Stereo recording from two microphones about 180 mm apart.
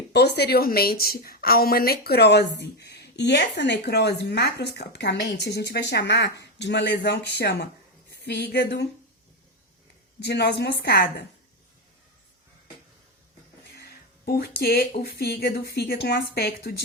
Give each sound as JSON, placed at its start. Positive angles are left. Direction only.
{"t": 0.1, "sound": "a woman's voice", "side_deg": 65}
{"t": 10.2, "sound": "a woman's voice", "side_deg": 65}
{"t": 14.3, "sound": "a woman's voice", "side_deg": 60}